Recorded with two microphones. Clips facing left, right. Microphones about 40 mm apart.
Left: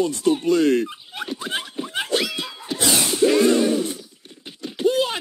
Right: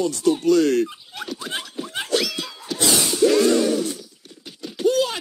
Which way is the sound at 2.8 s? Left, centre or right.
Left.